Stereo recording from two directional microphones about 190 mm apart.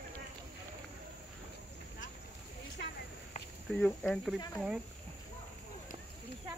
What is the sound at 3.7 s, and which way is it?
Speech, 5° left (ahead or behind).